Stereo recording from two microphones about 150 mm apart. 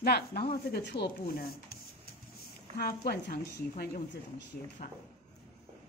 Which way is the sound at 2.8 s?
90° left.